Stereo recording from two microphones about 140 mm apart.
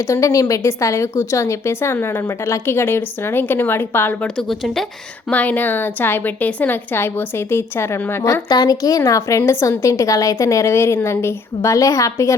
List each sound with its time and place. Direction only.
0.1 s a woman's voice: 25° left (ahead or behind)